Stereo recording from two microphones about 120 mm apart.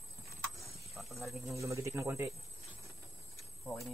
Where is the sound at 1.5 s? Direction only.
25° right (ahead or behind).